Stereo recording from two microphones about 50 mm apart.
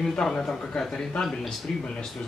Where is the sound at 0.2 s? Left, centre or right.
Centre.